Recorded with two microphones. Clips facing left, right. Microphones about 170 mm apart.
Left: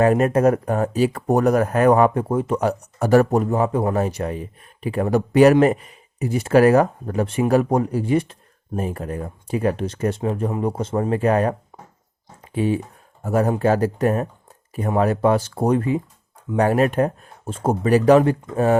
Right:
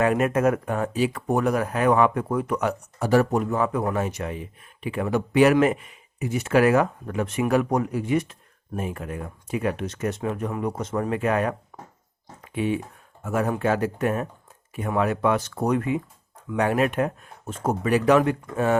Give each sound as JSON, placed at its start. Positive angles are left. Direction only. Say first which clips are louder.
{"t": 0.0, "sound": "a man's voice", "louder": "left 5 dB", "side_deg": 35}
{"t": 2.2, "sound": "speech", "louder": "left 4 dB", "side_deg": 25}
{"t": 3.0, "sound": "a man's voice", "louder": "left 4 dB", "side_deg": 45}
{"t": 11.7, "sound": "speech", "louder": "right 1 dB", "side_deg": 25}
{"t": 12.4, "sound": "a sound", "louder": "left 4 dB", "side_deg": 35}
{"t": 13.2, "sound": "a man's voice", "louder": "left 5 dB", "side_deg": 35}